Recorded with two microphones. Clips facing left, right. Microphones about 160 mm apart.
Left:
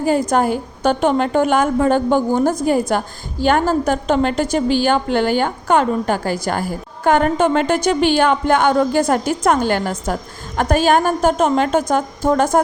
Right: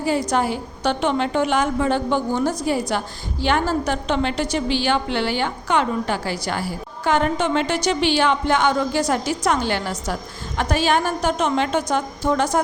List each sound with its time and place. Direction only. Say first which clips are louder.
0.0 s a woman's voice: left 4 dB; 50° left (ahead or behind)